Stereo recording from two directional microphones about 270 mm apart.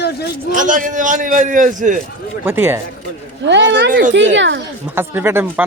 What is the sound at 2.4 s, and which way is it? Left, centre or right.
Speech, centre.